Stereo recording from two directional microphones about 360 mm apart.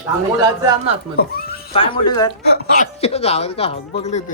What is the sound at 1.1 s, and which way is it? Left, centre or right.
Speech, centre.